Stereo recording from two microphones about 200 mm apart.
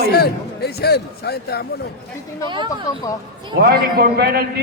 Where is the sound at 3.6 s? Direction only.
50° right (ahead or behind).